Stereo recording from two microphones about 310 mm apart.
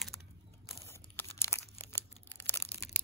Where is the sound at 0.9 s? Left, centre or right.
Centre.